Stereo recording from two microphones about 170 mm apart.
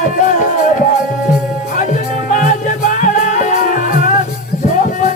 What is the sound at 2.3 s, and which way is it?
Music, 50° left (ahead or behind).